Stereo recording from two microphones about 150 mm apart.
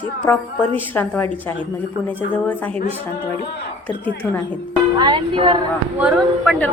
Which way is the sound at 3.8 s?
10° left (ahead or behind).